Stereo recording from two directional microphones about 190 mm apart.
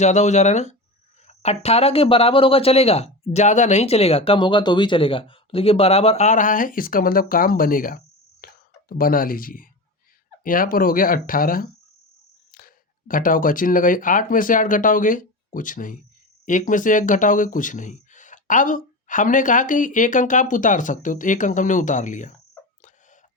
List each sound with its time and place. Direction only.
0.0 s speech: 40° left (ahead or behind)